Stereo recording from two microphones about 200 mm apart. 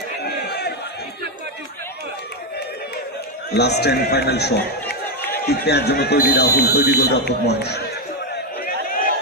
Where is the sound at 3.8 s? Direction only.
55° left (ahead or behind).